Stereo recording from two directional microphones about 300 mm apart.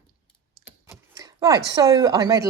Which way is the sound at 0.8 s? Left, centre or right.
Centre.